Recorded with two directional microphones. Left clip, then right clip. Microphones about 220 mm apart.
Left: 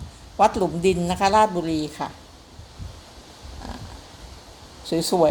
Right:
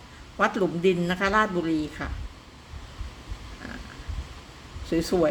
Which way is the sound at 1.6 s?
5° left (ahead or behind).